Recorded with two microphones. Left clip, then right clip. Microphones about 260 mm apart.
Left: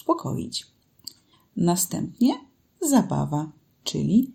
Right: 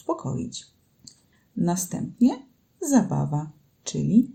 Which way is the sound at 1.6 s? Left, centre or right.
Left.